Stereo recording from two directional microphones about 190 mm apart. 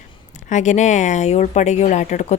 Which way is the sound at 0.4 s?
40° left (ahead or behind).